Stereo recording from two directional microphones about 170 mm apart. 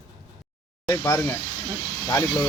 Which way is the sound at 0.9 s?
10° left (ahead or behind).